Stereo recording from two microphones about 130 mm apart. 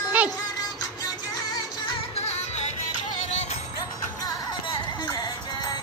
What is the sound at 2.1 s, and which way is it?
Music, 55° left (ahead or behind).